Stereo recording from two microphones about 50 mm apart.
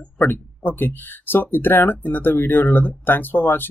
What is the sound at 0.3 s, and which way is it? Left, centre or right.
Speech, left.